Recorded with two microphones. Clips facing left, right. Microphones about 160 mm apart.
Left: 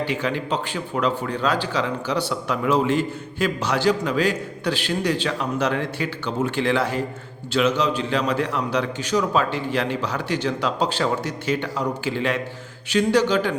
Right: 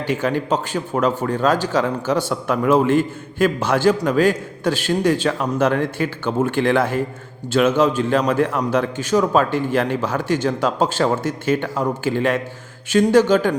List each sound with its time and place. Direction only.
0.0 s speech: 45° right (ahead or behind)